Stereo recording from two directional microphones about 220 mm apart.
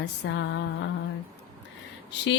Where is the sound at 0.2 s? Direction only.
55° left (ahead or behind).